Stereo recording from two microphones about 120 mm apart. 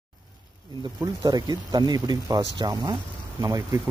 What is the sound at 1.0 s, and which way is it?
Speech, 35° right (ahead or behind).